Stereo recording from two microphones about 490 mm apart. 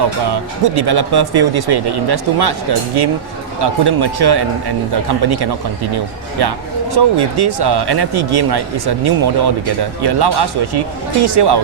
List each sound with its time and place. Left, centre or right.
0.8 s speech: right